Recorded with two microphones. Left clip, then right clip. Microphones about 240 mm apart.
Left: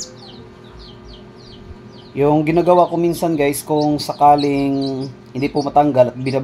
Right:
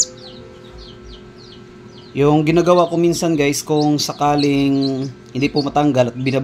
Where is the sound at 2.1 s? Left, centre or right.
Right.